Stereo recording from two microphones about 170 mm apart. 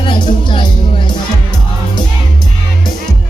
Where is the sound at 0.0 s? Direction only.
30° left (ahead or behind).